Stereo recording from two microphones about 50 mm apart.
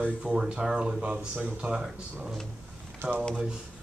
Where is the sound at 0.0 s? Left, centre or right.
Right.